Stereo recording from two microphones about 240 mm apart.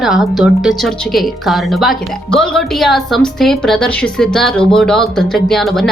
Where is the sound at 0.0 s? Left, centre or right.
Centre.